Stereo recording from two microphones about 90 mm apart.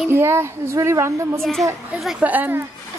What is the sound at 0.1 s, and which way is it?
A woman's voice, 30° right (ahead or behind).